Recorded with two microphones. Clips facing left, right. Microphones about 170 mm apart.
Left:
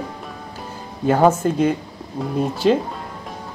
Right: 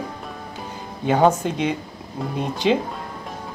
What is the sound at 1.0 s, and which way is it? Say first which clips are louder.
Speech: left 2 dB; centre (ahead or behind).